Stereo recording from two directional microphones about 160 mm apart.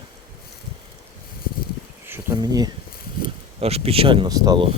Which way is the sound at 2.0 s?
20° right (ahead or behind).